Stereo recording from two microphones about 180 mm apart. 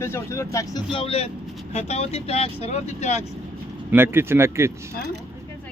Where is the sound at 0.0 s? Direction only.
15° left (ahead or behind).